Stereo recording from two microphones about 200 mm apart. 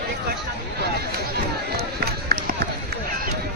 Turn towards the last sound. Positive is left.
turn(degrees=-50)  # may be behind; listen again after turning